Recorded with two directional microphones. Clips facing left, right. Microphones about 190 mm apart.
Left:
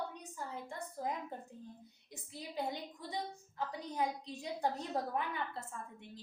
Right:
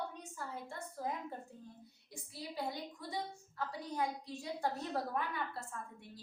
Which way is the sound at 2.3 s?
20° left (ahead or behind).